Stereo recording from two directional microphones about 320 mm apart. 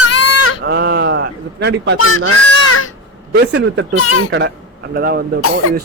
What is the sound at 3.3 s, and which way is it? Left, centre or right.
A man's voice, right.